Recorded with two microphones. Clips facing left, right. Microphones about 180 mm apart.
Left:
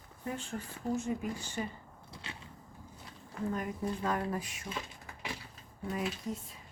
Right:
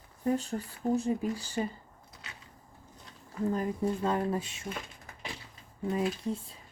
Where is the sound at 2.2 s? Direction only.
30° left (ahead or behind).